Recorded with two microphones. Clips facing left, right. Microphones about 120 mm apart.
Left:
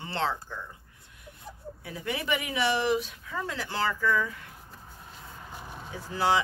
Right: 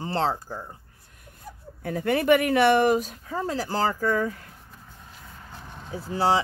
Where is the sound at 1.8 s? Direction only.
50° right (ahead or behind).